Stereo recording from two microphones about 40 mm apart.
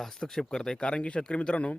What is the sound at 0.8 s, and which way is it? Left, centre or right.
Speech, left.